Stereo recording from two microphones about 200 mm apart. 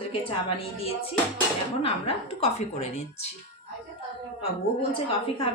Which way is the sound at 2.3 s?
35° left (ahead or behind).